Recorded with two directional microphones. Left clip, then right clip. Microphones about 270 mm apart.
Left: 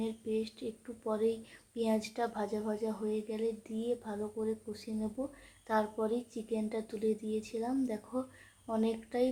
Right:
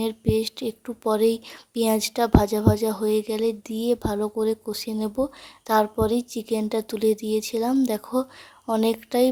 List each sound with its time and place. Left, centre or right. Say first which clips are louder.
0.0 s speech: right 12 dB; right